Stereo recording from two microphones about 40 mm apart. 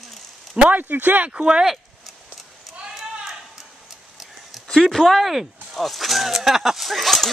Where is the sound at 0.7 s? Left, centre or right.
Right.